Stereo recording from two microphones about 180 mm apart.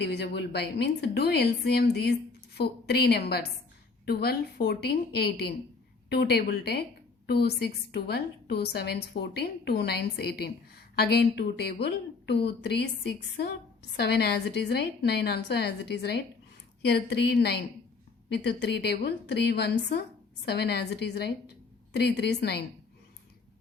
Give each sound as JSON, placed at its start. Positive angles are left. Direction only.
{"t": 0.0, "sound": "a woman's voice", "side_deg": 70}